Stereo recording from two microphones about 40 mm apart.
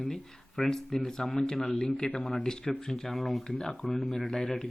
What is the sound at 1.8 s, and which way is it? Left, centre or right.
Speech, left.